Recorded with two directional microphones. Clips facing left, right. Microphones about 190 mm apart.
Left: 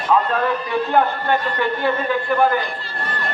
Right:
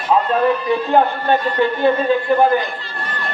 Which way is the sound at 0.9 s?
20° right (ahead or behind).